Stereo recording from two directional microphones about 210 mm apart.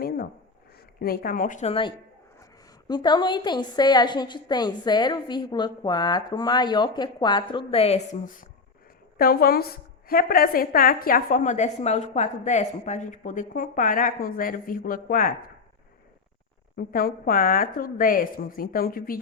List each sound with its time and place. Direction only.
1.0 s a woman's voice: 45° left (ahead or behind)
16.7 s a woman's voice: 45° left (ahead or behind)